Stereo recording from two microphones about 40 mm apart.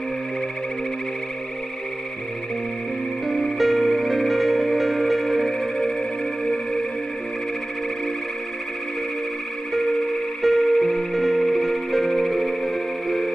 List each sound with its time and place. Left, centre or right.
3.3 s music: centre
10.4 s music: centre